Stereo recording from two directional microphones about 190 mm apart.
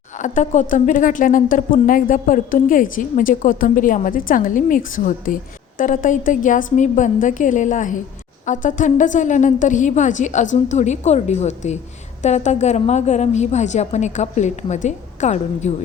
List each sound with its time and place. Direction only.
0.2 s a woman's voice: 40° left (ahead or behind)